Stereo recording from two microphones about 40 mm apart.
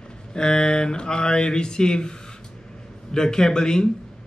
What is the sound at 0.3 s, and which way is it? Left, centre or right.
Speech, centre.